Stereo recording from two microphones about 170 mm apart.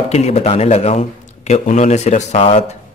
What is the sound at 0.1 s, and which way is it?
A man's voice, 40° left (ahead or behind).